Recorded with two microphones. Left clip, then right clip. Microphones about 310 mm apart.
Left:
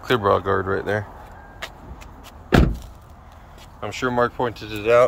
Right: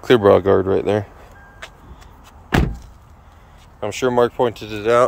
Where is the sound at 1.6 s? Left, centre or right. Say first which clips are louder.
Left 3 dB; left.